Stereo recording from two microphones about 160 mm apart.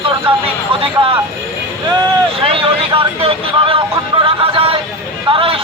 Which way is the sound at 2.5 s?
35° right (ahead or behind).